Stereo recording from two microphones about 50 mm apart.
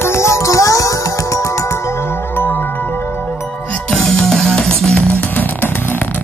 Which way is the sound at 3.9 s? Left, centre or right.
Centre.